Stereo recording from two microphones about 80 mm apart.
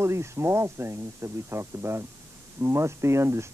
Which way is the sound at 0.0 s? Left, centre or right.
Right.